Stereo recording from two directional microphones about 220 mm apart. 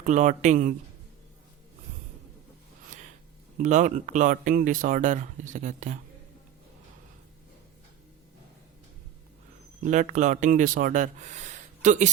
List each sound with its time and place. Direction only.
0.0 s speech: 35° right (ahead or behind)
3.6 s speech: 35° right (ahead or behind)
9.8 s speech: 35° right (ahead or behind)